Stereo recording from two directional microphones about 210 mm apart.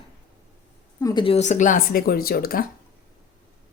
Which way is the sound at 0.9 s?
20° left (ahead or behind).